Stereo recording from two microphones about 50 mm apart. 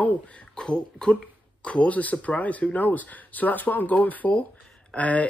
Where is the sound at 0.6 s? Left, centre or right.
Centre.